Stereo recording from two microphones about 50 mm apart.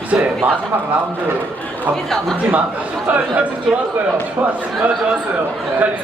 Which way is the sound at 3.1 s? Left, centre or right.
Right.